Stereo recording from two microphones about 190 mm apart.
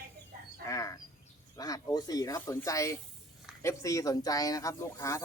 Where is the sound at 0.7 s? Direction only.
15° left (ahead or behind).